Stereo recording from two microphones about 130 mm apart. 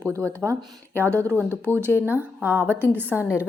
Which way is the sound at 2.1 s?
15° right (ahead or behind).